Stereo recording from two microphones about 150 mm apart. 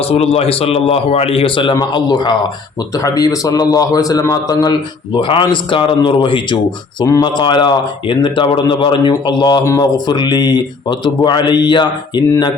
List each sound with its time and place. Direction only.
0.0 s a man's voice: 40° left (ahead or behind); by 12.5 s 25° left (ahead or behind)